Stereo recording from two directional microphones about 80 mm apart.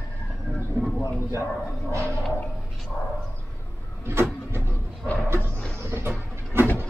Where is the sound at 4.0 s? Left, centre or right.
Right.